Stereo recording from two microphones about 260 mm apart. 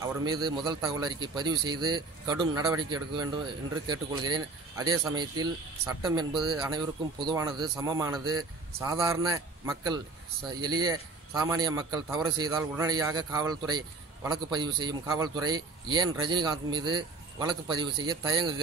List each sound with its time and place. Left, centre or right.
0.2 s a man's voice: centre